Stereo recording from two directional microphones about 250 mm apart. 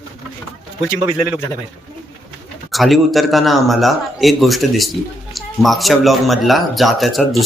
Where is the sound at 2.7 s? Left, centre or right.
Centre.